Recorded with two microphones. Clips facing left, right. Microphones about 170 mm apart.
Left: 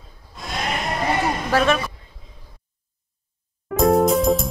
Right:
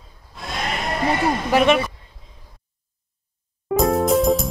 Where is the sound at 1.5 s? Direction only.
20° right (ahead or behind).